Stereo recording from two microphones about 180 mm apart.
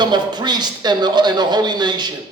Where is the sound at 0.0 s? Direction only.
25° right (ahead or behind).